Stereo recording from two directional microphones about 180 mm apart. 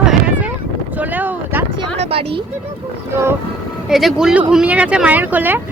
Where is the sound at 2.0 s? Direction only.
30° right (ahead or behind).